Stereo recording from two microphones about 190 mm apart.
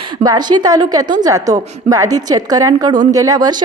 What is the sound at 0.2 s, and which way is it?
A woman's voice, 20° right (ahead or behind).